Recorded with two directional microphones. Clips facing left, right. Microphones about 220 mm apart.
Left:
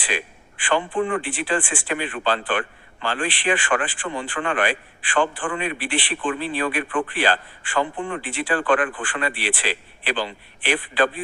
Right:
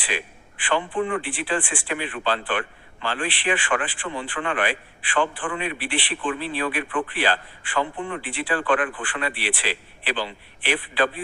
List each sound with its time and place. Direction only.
0.0 s a man's voice: 45° left (ahead or behind)